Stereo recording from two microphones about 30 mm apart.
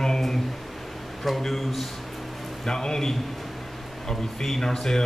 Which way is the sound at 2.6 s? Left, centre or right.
Centre.